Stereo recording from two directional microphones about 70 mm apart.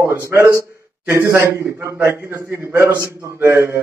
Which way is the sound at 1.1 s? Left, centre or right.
Right.